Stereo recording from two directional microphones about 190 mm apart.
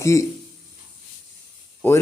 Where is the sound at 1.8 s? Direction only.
10° left (ahead or behind).